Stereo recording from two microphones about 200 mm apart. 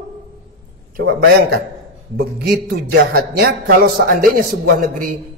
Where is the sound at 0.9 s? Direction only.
50° right (ahead or behind).